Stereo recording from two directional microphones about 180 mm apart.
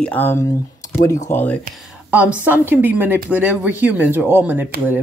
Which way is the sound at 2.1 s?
10° right (ahead or behind).